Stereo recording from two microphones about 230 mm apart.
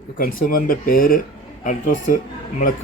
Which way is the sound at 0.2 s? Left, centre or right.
Left.